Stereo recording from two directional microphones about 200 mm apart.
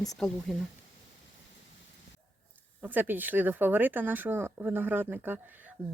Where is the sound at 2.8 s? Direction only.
10° right (ahead or behind).